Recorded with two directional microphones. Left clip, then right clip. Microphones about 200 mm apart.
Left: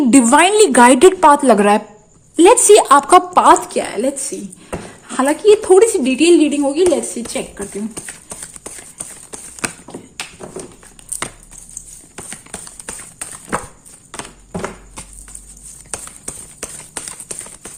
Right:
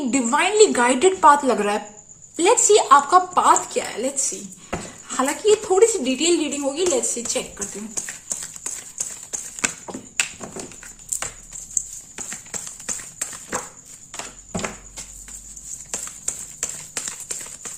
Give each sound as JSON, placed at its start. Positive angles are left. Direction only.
{"t": 0.1, "sound": "a woman's voice", "side_deg": 55}